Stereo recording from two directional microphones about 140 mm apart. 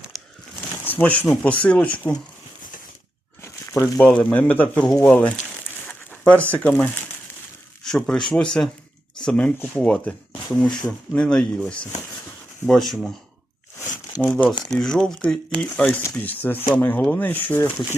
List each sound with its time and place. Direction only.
0.9 s speech: 10° left (ahead or behind)
3.4 s crumpling: 20° left (ahead or behind)
3.9 s speech: 10° left (ahead or behind)
5.8 s a sound: 10° left (ahead or behind)
7.9 s speech: 5° left (ahead or behind)
14.6 s speech: 5° left (ahead or behind)